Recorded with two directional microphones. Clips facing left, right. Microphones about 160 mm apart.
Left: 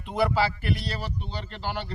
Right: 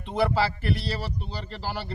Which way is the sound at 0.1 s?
Centre (ahead or behind).